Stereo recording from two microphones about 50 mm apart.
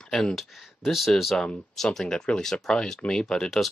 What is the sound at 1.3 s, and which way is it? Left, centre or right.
Speech, centre.